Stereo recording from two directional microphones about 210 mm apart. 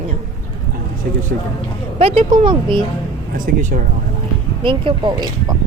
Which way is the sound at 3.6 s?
35° right (ahead or behind).